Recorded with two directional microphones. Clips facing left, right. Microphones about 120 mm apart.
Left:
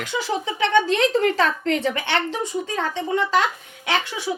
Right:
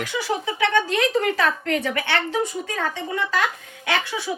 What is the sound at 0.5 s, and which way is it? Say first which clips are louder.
A woman's voice: left 3 dB; 25° left (ahead or behind).